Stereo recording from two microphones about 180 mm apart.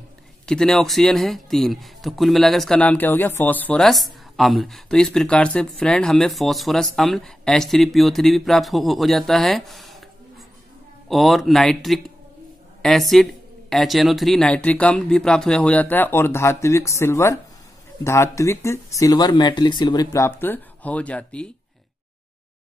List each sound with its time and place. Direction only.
0.5 s speech: 5° left (ahead or behind)
11.1 s speech: centre (ahead or behind)